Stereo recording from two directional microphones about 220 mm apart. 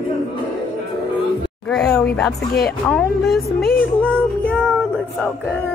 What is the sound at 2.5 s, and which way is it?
Speech, 45° left (ahead or behind).